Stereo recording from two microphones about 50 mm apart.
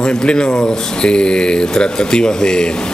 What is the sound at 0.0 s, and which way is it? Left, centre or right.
Speech, centre.